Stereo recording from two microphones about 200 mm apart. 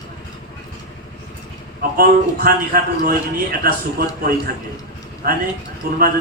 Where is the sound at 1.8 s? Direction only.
45° right (ahead or behind).